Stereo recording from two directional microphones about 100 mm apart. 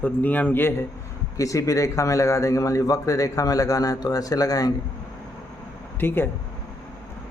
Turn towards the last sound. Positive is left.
turn(degrees=20)  # may be behind; listen again after turning